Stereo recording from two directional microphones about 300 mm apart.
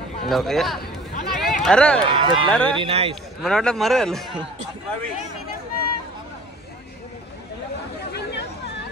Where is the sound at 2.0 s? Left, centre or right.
Centre.